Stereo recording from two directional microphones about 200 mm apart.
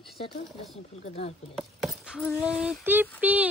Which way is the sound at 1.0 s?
30° left (ahead or behind).